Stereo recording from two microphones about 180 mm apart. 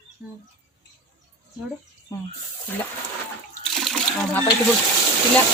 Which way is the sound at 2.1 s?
20° left (ahead or behind).